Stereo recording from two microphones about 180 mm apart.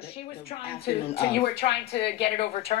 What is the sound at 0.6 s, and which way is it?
Speech, 30° left (ahead or behind).